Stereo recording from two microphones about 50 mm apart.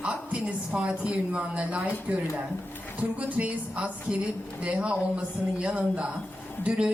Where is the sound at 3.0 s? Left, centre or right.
Right.